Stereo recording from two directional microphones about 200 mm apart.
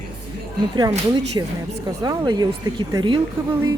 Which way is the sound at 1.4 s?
15° right (ahead or behind).